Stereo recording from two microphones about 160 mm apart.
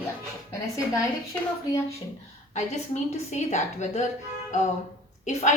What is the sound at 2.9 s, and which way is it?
A woman's voice, 45° left (ahead or behind).